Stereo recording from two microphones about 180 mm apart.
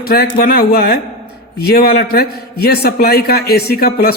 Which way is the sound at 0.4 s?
60° left (ahead or behind).